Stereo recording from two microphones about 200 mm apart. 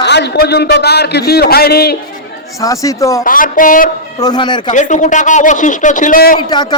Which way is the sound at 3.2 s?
45° left (ahead or behind).